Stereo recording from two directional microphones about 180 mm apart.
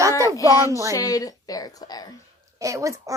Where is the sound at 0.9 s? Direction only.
20° left (ahead or behind).